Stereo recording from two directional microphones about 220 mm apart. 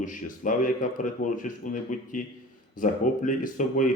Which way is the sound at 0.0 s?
35° left (ahead or behind).